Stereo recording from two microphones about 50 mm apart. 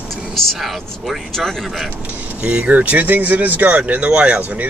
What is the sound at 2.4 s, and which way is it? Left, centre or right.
Speech, right.